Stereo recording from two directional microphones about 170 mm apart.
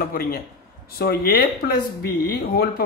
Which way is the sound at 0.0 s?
60° left (ahead or behind).